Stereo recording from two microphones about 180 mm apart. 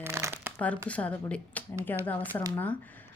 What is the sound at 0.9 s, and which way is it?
A woman's voice, 5° left (ahead or behind).